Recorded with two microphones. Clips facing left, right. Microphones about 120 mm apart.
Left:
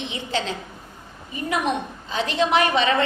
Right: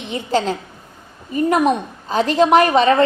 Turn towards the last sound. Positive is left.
turn(degrees=-40)  # may be behind; listen again after turning